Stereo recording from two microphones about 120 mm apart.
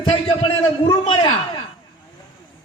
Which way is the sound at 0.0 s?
50° left (ahead or behind).